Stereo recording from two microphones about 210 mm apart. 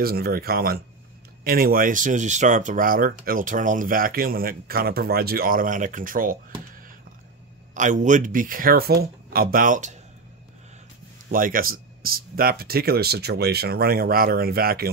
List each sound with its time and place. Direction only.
0.0 s speech: 45° right (ahead or behind)
7.7 s speech: 35° right (ahead or behind)
11.2 s speech: 40° right (ahead or behind)